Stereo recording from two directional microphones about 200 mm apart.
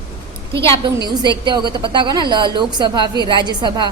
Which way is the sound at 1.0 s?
20° right (ahead or behind).